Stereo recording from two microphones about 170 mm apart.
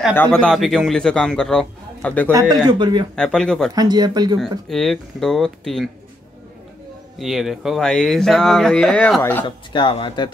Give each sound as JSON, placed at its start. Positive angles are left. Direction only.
{"t": 0.1, "sound": "speech", "side_deg": 10}
{"t": 2.3, "sound": "speech", "side_deg": -25}
{"t": 3.2, "sound": "speech", "side_deg": 5}
{"t": 3.7, "sound": "speech", "side_deg": -25}
{"t": 4.6, "sound": "speech", "side_deg": 0}
{"t": 7.2, "sound": "speech", "side_deg": 0}
{"t": 9.7, "sound": "speech", "side_deg": 30}